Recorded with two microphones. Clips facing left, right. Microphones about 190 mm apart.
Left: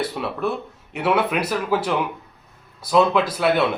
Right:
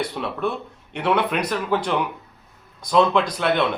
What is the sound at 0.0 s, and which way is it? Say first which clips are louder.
Speech: left 1 dB; 5° left (ahead or behind).